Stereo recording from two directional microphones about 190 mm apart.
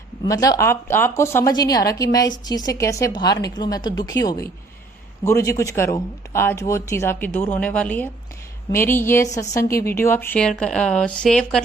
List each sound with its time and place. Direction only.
0.3 s a woman's voice: 20° left (ahead or behind); by 11.6 s 5° left (ahead or behind)